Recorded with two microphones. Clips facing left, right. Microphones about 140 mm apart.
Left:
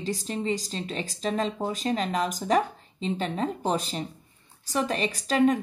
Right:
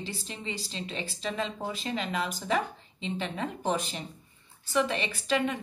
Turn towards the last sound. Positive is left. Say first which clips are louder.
# left 6 dB
turn(degrees=40)  # may be behind; listen again after turning